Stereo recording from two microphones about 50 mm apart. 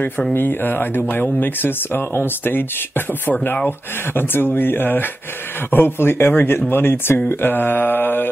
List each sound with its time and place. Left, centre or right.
0.3 s speech: left
3.6 s speech: left
7.2 s mantra: left